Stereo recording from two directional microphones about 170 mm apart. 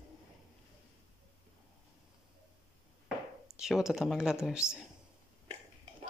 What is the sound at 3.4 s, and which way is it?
Speech, 5° right (ahead or behind).